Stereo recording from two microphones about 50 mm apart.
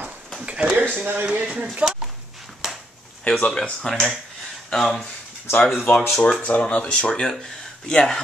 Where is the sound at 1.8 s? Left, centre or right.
Right.